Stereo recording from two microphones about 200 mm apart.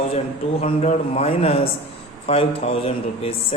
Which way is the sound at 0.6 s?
30° left (ahead or behind).